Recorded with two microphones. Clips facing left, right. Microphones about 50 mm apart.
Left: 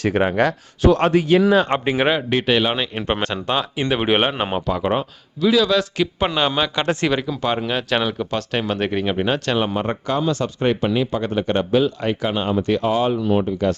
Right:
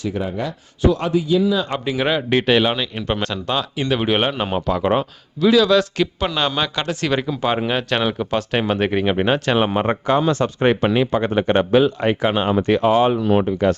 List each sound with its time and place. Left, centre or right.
0.0 s speech: left
2.3 s speech: centre
2.7 s speech: left
4.5 s speech: centre
6.1 s speech: centre
7.1 s speech: centre
9.6 s speech: right
10.8 s speech: right
13.2 s speech: right